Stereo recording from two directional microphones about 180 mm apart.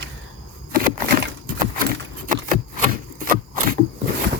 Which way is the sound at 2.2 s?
45° right (ahead or behind).